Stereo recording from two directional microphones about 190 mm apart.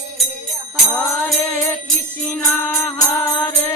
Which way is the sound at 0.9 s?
5° left (ahead or behind).